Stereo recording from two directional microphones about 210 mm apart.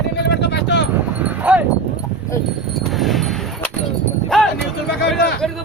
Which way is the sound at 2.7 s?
Centre (ahead or behind).